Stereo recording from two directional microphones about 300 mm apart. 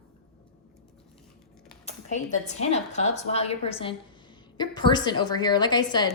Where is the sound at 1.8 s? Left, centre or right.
Left.